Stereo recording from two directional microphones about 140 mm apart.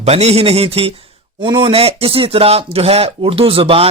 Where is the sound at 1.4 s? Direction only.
35° right (ahead or behind).